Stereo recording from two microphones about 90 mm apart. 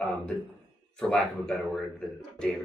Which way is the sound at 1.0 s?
5° left (ahead or behind).